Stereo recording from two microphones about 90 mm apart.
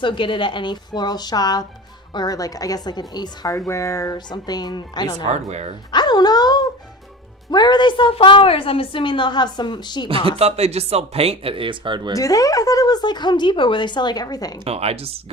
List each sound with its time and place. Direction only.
0.0 s a woman's voice: 65° left (ahead or behind); by 3.6 s 45° left (ahead or behind)
3.7 s speech: 35° left (ahead or behind)
4.3 s a woman's voice: 50° left (ahead or behind)
10.1 s speech: 80° right; by 12.1 s 60° right (ahead or behind)
12.1 s speech: 40° left (ahead or behind)
14.6 s speech: 90° right